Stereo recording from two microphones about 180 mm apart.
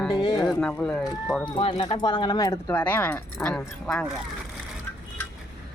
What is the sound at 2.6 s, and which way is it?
Speech, 10° left (ahead or behind).